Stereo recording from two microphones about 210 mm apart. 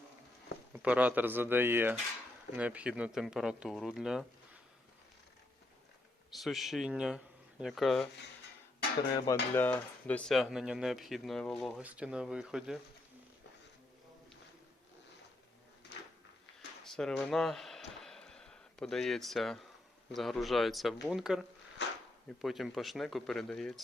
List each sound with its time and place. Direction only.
0.7 s speech: 5° right (ahead or behind)
6.3 s speech: centre (ahead or behind)
9.1 s speech: 15° left (ahead or behind); by 12.8 s 5° right (ahead or behind)
16.8 s a sound: centre (ahead or behind)
20.1 s speech: centre (ahead or behind)